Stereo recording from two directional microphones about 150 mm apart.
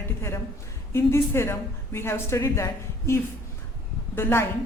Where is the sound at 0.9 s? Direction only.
15° left (ahead or behind).